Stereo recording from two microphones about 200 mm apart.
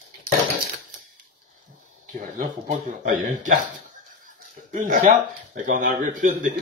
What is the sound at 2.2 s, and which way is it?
Speech, 45° right (ahead or behind).